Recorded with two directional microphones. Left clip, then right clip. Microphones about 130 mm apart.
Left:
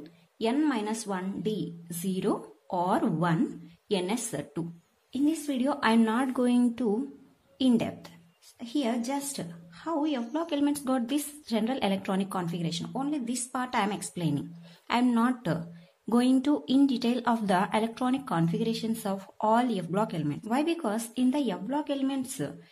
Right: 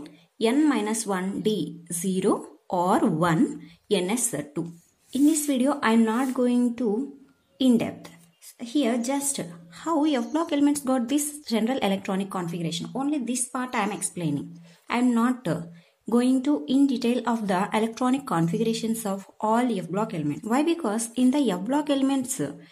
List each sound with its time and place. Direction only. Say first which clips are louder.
0.0 s a woman's voice: right 5 dB; 30° right (ahead or behind)
5.1 s a woman's voice: right 6 dB; 30° right (ahead or behind)
10.4 s speech: right 4 dB; 25° right (ahead or behind)
20.4 s a woman's voice: right 4 dB; 25° right (ahead or behind)